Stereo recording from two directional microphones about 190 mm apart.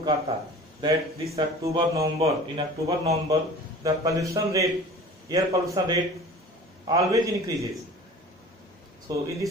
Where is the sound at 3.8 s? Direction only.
15° right (ahead or behind).